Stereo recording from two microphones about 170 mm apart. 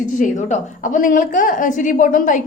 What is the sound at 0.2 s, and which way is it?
A woman's voice, 45° left (ahead or behind).